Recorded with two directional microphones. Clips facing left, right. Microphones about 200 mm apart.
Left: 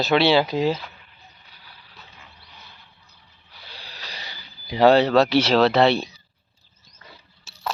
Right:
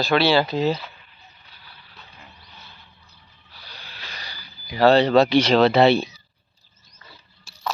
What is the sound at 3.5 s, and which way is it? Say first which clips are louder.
Music: left 1 dB; 25° left (ahead or behind).